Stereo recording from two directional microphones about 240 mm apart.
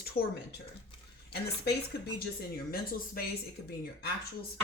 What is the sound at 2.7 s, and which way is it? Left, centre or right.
Speech, left.